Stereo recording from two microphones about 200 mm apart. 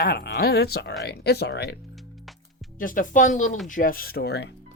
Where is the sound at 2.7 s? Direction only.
45° left (ahead or behind).